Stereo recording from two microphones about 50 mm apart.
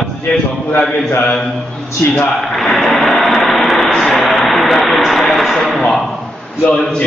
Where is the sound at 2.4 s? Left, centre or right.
Centre.